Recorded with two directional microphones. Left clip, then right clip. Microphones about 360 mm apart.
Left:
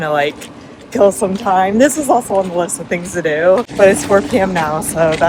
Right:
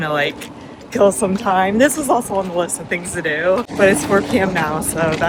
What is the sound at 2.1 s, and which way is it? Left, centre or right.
Speech, left.